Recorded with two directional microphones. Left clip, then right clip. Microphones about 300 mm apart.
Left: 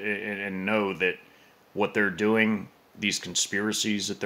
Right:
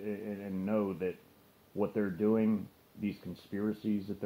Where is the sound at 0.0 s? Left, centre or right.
Centre.